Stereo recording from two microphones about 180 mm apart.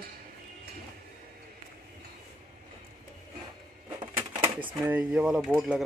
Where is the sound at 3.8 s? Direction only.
25° right (ahead or behind).